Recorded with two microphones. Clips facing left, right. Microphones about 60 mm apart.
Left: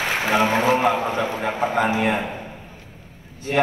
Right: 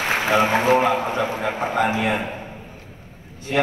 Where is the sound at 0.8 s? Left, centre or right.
Left.